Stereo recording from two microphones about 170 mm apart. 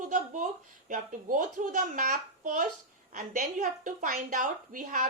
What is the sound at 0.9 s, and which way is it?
A woman's voice, 50° right (ahead or behind).